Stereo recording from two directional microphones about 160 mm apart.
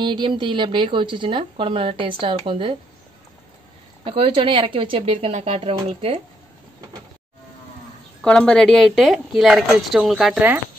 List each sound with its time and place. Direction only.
0.0 s speech: 30° right (ahead or behind)
4.0 s speech: 35° right (ahead or behind)
8.2 s a woman's voice: 5° left (ahead or behind)